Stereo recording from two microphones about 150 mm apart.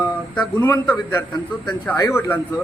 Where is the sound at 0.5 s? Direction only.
20° left (ahead or behind).